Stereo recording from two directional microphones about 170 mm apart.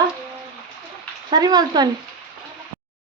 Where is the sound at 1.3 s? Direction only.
25° right (ahead or behind).